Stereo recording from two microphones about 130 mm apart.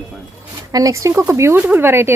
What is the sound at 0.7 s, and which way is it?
Speech, 25° right (ahead or behind).